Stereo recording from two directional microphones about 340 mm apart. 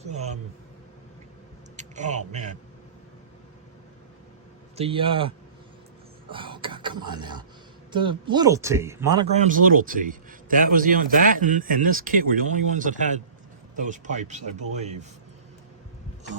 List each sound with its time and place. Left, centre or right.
1.7 s speech: right
4.8 s a man's voice: centre
6.3 s speech: centre